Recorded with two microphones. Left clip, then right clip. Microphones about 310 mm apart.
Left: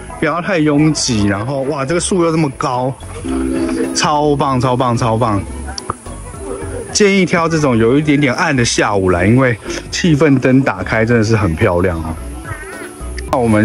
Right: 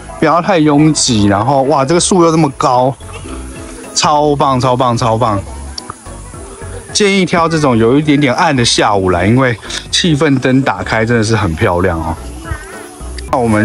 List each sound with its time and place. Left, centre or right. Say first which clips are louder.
0.2 s speech: right 5 dB; centre
0.9 s speech: right 4 dB; right
1.7 s speech: right 6 dB; centre
3.9 s speech: right 5 dB; centre
6.9 s speech: right 1 dB; centre
13.3 s speech: right 1 dB; centre